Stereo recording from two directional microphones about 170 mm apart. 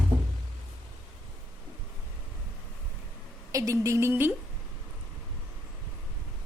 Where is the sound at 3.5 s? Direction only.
20° right (ahead or behind).